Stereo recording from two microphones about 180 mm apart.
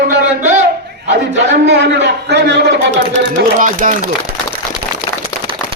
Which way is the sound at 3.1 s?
45° right (ahead or behind).